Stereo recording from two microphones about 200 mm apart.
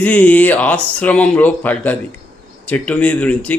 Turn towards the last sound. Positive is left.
turn(degrees=5)  # may be behind; listen again after turning